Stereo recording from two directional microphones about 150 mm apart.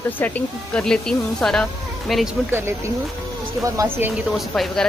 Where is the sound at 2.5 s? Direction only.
15° right (ahead or behind).